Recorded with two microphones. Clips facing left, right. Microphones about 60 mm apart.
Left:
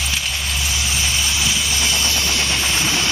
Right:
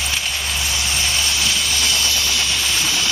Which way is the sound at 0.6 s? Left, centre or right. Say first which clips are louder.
Even; centre.